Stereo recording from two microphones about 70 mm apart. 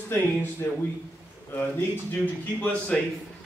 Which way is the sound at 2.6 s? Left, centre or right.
Centre.